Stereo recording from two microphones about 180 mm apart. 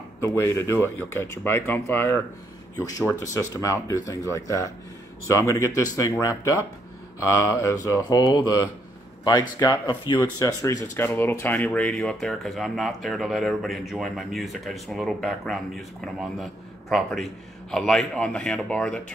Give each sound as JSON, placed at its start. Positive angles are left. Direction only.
{"t": 0.2, "sound": "speech", "side_deg": 15}
{"t": 4.1, "sound": "speech", "side_deg": 15}